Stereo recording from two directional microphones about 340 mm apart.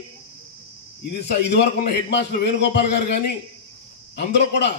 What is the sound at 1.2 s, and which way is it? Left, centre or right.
A man's voice, left.